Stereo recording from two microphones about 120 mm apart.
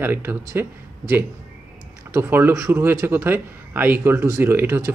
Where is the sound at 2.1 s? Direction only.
20° right (ahead or behind).